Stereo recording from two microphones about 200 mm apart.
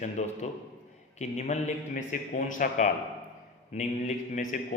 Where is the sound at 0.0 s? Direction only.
35° left (ahead or behind).